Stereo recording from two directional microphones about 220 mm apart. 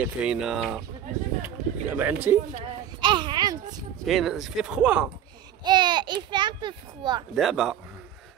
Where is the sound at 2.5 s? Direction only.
25° right (ahead or behind).